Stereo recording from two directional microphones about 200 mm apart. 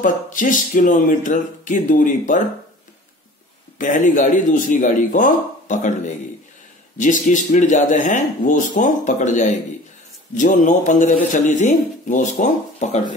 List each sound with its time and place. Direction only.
0.0 s speech: 40° left (ahead or behind)
3.7 s speech: 40° left (ahead or behind)